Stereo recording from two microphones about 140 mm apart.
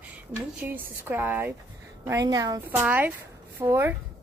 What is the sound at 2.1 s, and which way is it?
Speech, 25° right (ahead or behind).